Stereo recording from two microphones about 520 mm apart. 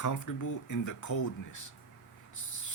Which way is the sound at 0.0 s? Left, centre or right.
Left.